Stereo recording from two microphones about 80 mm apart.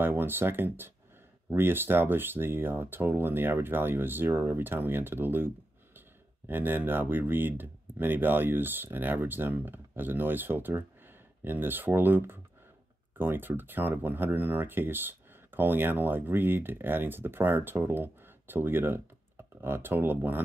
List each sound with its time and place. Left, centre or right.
0.0 s speech: right